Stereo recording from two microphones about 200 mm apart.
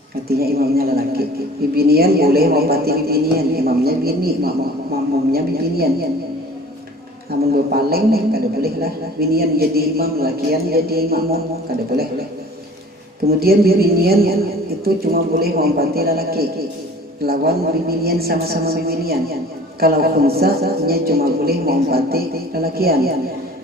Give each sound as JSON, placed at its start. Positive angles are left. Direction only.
{"t": 0.3, "sound": "a man's voice", "side_deg": -50}
{"t": 7.5, "sound": "a man's voice", "side_deg": -50}
{"t": 13.2, "sound": "a man's voice", "side_deg": -50}